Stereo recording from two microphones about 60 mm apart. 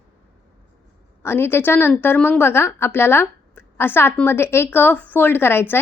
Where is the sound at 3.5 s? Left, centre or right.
Left.